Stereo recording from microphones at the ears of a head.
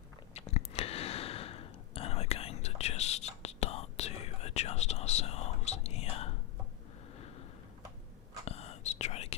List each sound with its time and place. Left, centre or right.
0.3 s whispering: left
8.4 s whispering: left